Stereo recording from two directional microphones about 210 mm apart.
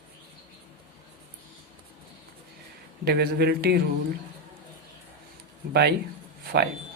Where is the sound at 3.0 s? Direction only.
50° right (ahead or behind).